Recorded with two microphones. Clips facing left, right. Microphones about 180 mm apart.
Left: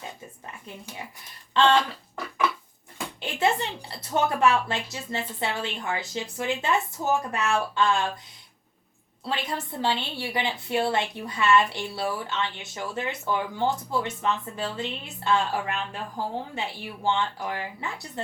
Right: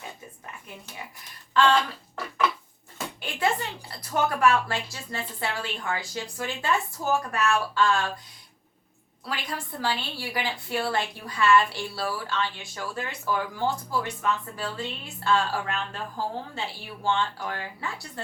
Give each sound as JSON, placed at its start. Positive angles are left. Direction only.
{"t": 3.2, "sound": "a woman's voice", "side_deg": 25}
{"t": 9.2, "sound": "a woman's voice", "side_deg": 25}